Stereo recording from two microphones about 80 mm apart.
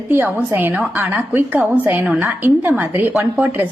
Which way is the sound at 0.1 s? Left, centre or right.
Right.